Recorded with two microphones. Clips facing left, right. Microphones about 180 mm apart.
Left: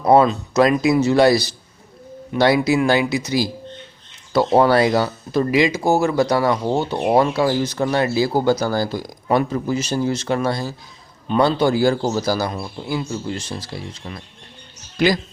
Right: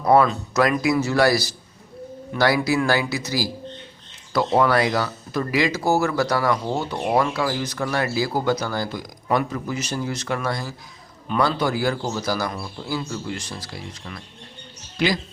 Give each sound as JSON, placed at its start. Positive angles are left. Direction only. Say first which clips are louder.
{"t": 0.0, "sound": "speech", "louder": "left 3 dB", "side_deg": 25}
{"t": 14.9, "sound": "speech", "louder": "left 5 dB", "side_deg": 45}